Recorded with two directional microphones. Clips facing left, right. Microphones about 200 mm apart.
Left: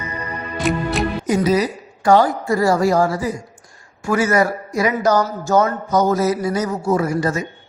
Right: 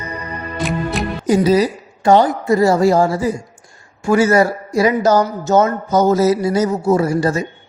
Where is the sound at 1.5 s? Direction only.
30° right (ahead or behind).